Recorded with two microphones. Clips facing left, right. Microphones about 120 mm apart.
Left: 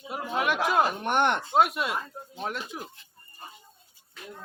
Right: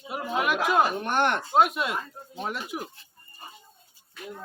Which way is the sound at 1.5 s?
Centre (ahead or behind).